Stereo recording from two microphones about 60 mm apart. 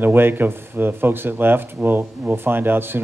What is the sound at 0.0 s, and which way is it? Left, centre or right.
Speech, right.